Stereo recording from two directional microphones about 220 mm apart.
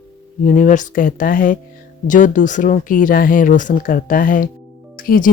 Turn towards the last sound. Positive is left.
turn(degrees=40)  # may be behind; listen again after turning